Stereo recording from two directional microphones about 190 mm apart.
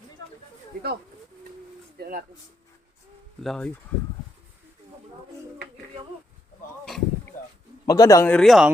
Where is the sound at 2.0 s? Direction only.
50° right (ahead or behind).